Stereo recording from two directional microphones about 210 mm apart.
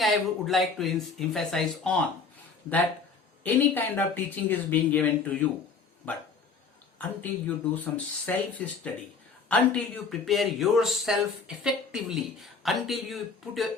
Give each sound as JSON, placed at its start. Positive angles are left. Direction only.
{"t": 0.0, "sound": "speech", "side_deg": 0}
{"t": 3.4, "sound": "speech", "side_deg": 10}